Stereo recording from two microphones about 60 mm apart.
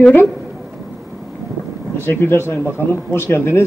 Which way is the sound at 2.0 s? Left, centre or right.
Left.